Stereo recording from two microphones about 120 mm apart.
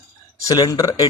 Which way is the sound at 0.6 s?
30° left (ahead or behind).